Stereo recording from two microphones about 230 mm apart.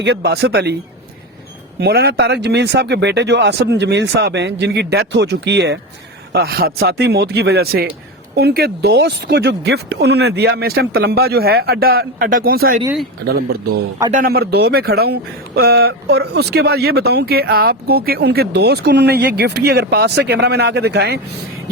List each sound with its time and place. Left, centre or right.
0.0 s speech: right
1.8 s speech: right